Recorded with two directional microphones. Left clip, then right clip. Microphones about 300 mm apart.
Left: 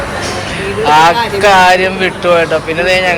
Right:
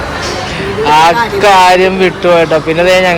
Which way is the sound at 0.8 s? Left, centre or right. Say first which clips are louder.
Right 1 dB; centre.